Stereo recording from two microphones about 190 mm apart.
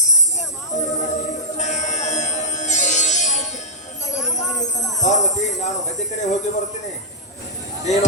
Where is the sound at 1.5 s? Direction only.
40° left (ahead or behind).